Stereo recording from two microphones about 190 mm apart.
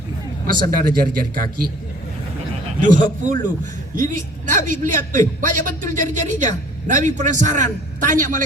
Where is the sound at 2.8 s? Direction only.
40° right (ahead or behind).